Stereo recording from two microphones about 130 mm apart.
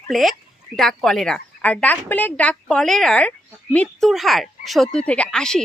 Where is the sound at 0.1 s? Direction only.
Centre (ahead or behind).